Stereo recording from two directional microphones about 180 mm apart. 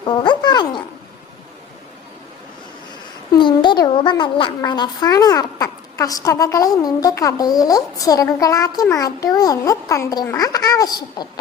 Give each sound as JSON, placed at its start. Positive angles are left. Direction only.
{"t": 0.0, "sound": "speech", "side_deg": 25}
{"t": 3.3, "sound": "a woman's voice", "side_deg": 25}